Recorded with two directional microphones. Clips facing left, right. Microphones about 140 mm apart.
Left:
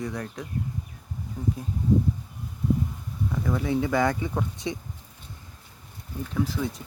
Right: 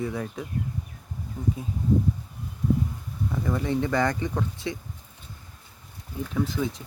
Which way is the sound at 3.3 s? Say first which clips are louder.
Even; centre (ahead or behind).